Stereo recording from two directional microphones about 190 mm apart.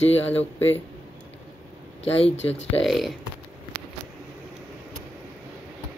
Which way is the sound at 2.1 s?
30° left (ahead or behind).